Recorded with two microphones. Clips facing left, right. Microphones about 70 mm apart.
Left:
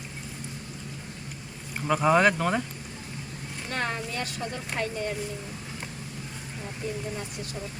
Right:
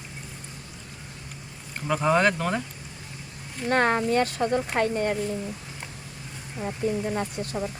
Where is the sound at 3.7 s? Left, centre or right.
Right.